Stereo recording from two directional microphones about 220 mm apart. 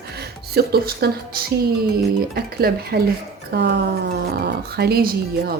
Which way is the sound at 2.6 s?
45° right (ahead or behind).